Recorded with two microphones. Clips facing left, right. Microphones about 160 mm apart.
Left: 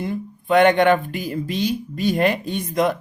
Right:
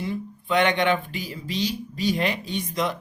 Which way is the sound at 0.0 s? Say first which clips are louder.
Left 3 dB; 50° left (ahead or behind).